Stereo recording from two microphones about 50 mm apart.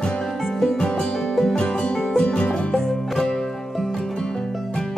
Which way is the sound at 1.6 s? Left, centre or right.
Left.